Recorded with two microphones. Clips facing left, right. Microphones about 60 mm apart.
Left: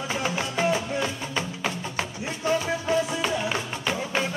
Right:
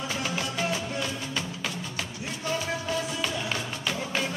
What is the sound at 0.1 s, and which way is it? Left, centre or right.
Music, left.